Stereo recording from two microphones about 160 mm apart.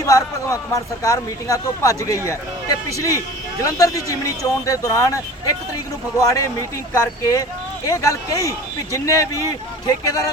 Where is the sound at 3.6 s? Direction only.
20° left (ahead or behind).